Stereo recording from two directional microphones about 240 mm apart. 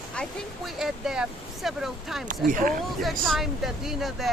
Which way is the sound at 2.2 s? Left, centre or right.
Right.